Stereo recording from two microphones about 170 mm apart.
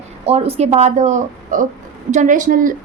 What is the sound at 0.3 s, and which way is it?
A woman's voice, 35° right (ahead or behind).